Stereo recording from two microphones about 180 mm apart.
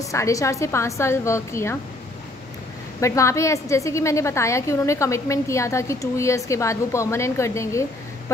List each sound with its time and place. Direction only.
0.0 s a woman's voice: 15° left (ahead or behind)
3.0 s a woman's voice: 15° left (ahead or behind)